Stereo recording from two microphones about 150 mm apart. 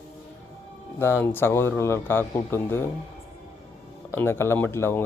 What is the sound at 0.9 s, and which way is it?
Speech, 15° left (ahead or behind).